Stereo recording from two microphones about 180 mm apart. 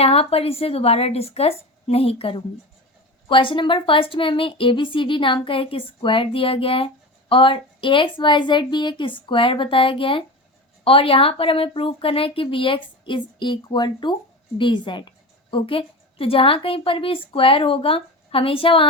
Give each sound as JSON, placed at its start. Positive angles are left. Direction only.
{"t": 0.0, "sound": "a woman's voice", "side_deg": 35}